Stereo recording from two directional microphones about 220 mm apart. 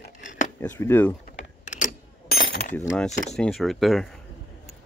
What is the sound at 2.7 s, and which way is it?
Speech, 5° left (ahead or behind).